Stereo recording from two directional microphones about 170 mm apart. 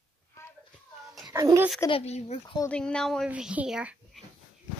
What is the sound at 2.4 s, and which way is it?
Speech, 20° left (ahead or behind).